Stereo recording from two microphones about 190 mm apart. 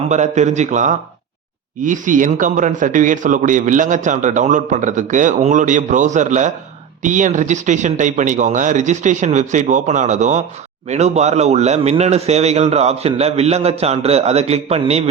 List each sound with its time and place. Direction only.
0.1 s speech: 40° right (ahead or behind)